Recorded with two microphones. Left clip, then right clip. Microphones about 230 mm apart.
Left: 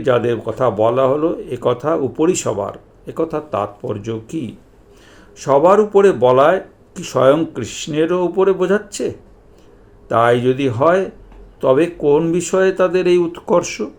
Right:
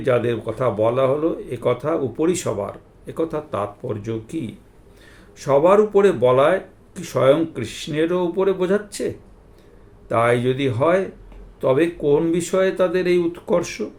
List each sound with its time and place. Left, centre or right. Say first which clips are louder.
0.0 s a man's voice: left 4 dB; centre
5.4 s a man's voice: left 3 dB; centre